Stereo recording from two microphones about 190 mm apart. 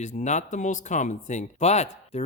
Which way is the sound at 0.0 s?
40° left (ahead or behind).